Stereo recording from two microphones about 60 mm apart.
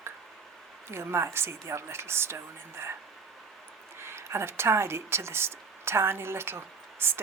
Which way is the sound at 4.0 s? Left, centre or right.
Right.